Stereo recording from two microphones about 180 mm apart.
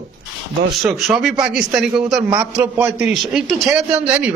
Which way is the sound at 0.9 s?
Centre (ahead or behind).